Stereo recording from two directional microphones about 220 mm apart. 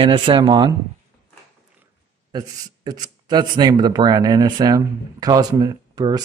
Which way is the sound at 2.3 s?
15° right (ahead or behind).